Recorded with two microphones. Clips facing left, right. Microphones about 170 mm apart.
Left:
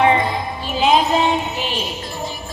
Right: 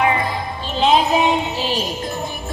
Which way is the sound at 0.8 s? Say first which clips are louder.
Even; centre (ahead or behind).